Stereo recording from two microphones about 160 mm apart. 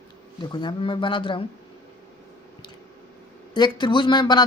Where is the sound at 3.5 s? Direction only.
30° left (ahead or behind).